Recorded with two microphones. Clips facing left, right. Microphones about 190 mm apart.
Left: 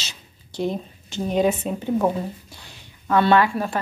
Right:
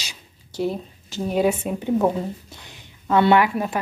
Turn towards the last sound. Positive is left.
turn(degrees=-15)  # may be behind; listen again after turning